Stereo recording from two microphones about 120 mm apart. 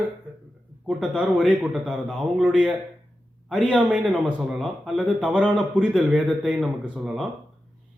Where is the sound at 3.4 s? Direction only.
Centre (ahead or behind).